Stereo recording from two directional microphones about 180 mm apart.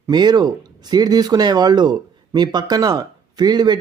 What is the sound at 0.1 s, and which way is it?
Speech, 25° right (ahead or behind).